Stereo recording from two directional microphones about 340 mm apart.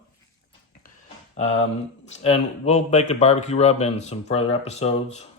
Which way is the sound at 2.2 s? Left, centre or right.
Centre.